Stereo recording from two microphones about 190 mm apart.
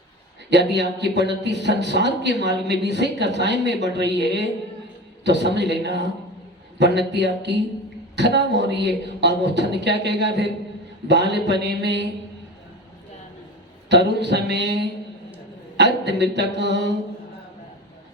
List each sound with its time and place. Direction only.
0.5 s speech: 65° right (ahead or behind)
13.9 s speech: 65° right (ahead or behind)